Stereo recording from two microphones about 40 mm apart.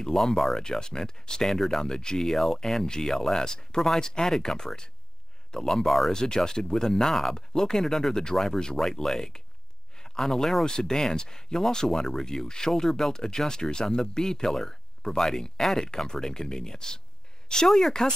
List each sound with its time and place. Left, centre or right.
0.0 s speech: centre
5.9 s speech: centre
6.1 s speech: centre
17.6 s speech: centre